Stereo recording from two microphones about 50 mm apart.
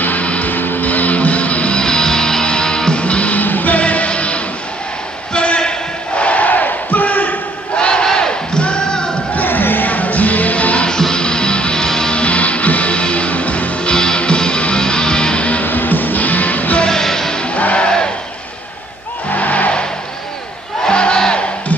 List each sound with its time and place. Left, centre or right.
0.0 s music: left
1.8 s music: centre
5.3 s battle cry: left
7.7 s battle cry: centre
9.3 s music: left
10.9 s music: centre
15.6 s music: left
16.8 s music: centre
17.6 s music: left
19.3 s music: left
20.8 s crowd: centre